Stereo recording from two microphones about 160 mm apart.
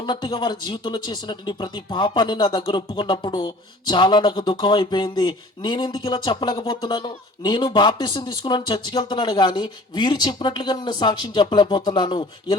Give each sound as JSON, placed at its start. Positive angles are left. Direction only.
{"t": 0.0, "sound": "speech", "side_deg": 30}